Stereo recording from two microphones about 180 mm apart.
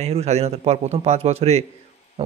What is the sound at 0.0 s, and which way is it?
Speech, 35° right (ahead or behind).